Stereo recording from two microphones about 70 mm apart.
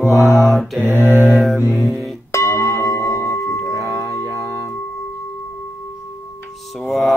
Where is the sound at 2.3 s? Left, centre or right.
Left.